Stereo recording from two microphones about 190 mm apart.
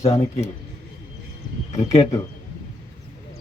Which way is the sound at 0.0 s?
30° left (ahead or behind).